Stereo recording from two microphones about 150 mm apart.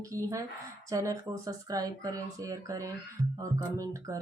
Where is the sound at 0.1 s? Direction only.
20° right (ahead or behind).